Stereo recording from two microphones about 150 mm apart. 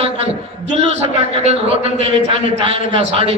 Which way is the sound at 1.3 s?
45° right (ahead or behind).